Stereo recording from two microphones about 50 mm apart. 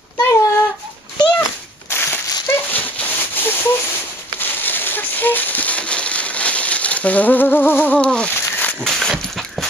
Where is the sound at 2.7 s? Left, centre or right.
Left.